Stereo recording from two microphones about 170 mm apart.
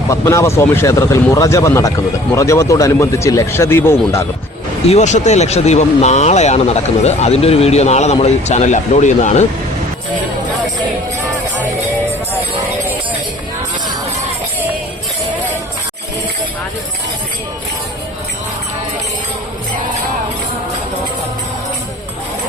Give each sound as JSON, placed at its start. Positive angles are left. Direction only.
{"t": 0.1, "sound": "speech", "side_deg": 15}
{"t": 4.9, "sound": "speech", "side_deg": 45}